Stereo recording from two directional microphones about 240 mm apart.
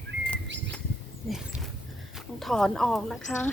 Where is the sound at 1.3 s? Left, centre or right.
Centre.